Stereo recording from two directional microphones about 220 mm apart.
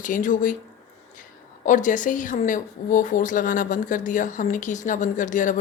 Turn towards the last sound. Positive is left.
turn(degrees=35)  # may be behind; listen again after turning